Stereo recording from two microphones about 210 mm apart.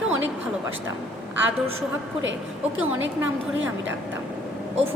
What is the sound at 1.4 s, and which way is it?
Speech, 65° right (ahead or behind).